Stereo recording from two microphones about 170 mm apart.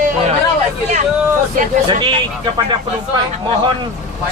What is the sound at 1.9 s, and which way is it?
Speech, 30° right (ahead or behind).